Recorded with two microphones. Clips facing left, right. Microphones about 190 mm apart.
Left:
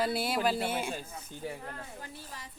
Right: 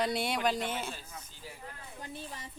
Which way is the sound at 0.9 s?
60° left (ahead or behind).